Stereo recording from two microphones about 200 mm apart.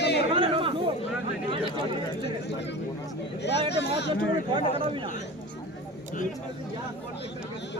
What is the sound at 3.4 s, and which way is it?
Speech, 55° left (ahead or behind).